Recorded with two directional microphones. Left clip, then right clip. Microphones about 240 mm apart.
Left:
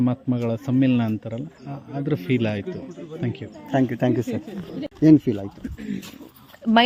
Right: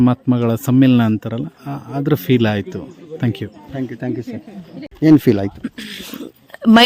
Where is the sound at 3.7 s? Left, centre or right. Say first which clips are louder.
Left 4 dB; centre.